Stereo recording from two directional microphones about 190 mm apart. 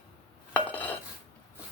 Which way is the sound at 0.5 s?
10° left (ahead or behind).